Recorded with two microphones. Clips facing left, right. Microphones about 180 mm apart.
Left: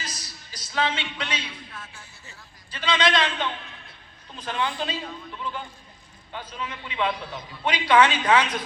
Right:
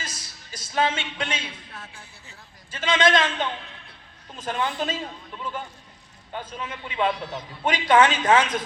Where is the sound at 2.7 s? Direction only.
45° right (ahead or behind).